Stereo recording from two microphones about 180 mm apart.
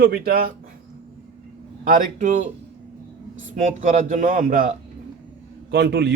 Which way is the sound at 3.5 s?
45° right (ahead or behind).